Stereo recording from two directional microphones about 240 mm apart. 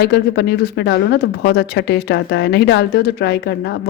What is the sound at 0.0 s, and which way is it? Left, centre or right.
Speech, left.